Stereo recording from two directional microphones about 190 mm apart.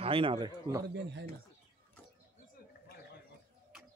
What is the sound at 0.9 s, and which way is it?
Speech, 65° right (ahead or behind).